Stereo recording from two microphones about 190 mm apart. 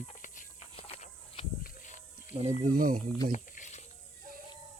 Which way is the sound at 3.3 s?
40° left (ahead or behind).